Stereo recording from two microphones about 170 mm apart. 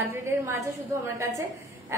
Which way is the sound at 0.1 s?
15° right (ahead or behind).